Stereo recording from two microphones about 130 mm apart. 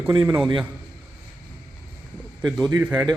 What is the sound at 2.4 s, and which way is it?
Speech, 5° right (ahead or behind).